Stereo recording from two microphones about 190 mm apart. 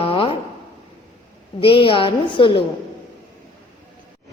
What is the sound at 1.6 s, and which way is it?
A woman's voice, 30° left (ahead or behind).